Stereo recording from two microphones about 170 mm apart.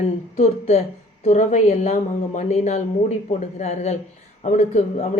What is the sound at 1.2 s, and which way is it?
A woman's voice, 45° left (ahead or behind).